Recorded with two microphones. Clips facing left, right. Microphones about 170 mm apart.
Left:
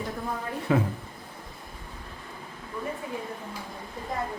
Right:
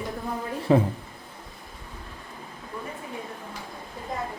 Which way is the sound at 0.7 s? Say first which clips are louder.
Right 5 dB; 30° right (ahead or behind).